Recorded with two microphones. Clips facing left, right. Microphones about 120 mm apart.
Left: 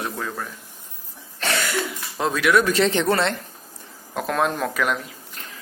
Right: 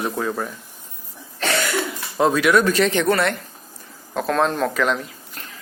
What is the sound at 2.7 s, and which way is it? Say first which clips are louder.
Speech: right 1 dB; 30° left (ahead or behind).